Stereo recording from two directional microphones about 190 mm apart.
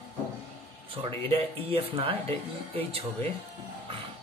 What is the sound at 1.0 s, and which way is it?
Speech, 30° right (ahead or behind).